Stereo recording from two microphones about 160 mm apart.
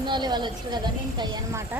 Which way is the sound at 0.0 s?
30° right (ahead or behind).